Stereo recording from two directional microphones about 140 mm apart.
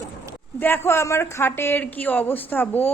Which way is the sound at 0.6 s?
15° left (ahead or behind).